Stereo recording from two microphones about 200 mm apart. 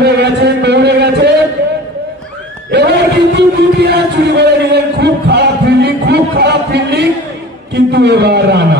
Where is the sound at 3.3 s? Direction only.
55° right (ahead or behind).